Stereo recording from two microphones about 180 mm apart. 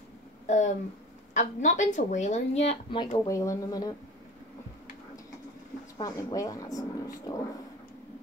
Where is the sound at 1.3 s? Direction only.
40° left (ahead or behind).